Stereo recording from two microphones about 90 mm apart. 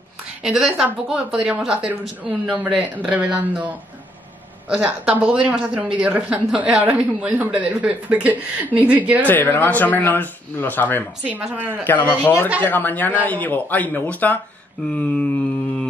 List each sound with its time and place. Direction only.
0.4 s speech: 5° right (ahead or behind)
9.3 s speech: 20° left (ahead or behind)
11.2 s speech: 15° right (ahead or behind)
11.8 s speech: 20° left (ahead or behind)
15.0 s mantra: 15° left (ahead or behind)